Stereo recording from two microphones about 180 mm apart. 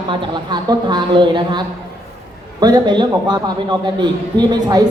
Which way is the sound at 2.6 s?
25° right (ahead or behind).